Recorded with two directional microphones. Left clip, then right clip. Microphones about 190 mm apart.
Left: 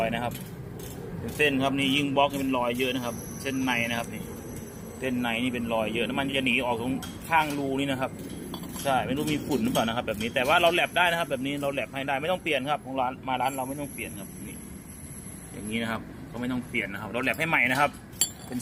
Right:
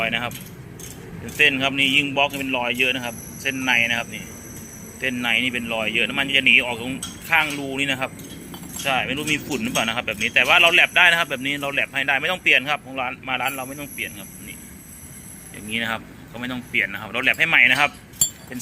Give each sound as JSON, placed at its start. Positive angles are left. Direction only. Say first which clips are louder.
{"t": 0.0, "sound": "speech", "louder": "right 5 dB", "side_deg": 0}
{"t": 1.4, "sound": "speech", "louder": "right 7 dB", "side_deg": 0}
{"t": 15.7, "sound": "speech", "louder": "right 7 dB", "side_deg": 0}